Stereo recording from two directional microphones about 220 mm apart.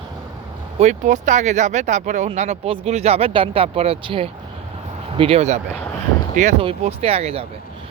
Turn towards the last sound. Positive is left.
turn(degrees=-25)  # may be behind; listen again after turning